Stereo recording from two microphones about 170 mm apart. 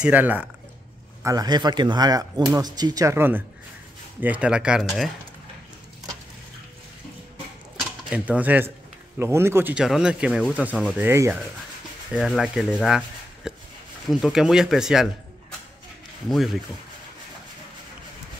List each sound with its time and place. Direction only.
0.0 s speech: 10° right (ahead or behind)
1.2 s speech: 20° right (ahead or behind); by 5.1 s centre (ahead or behind)
8.1 s speech: 10° right (ahead or behind)
12.1 s speech: centre (ahead or behind)